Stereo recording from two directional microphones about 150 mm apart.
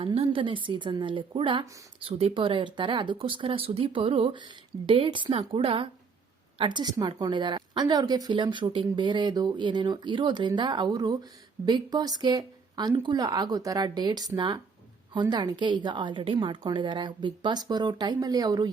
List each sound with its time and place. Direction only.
0.0 s a woman's voice: 35° right (ahead or behind)